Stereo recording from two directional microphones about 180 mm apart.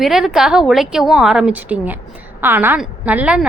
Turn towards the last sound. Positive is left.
turn(degrees=-5)  # may be behind; listen again after turning